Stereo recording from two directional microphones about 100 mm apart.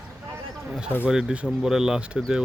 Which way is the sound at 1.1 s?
5° right (ahead or behind).